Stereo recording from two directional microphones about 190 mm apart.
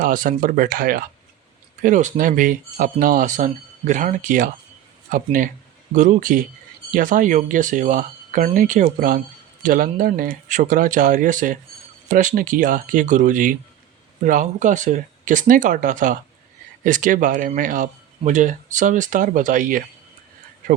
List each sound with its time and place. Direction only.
0.0 s speech: 45° right (ahead or behind)